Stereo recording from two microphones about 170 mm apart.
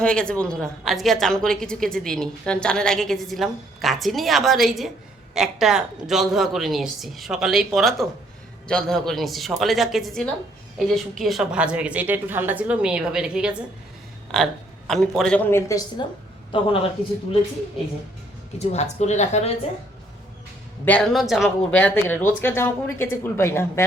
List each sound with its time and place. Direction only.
0.0 s a woman's voice: 5° left (ahead or behind)
14.8 s a woman's voice: 5° left (ahead or behind)
16.0 s a woman's voice: 25° left (ahead or behind)
18.6 s a woman's voice: 40° left (ahead or behind)
20.8 s a woman's voice: 5° left (ahead or behind)
21.8 s speech: 10° left (ahead or behind)